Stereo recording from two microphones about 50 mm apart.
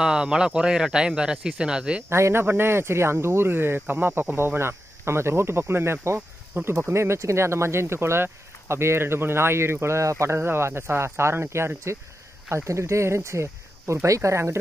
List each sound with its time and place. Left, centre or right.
0.0 s speech: centre
2.0 s speech: right
4.6 s speech: right
6.9 s speech: right
10.4 s speech: right